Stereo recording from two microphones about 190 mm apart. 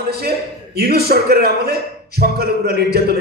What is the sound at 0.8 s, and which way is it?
A man's voice, 55° right (ahead or behind).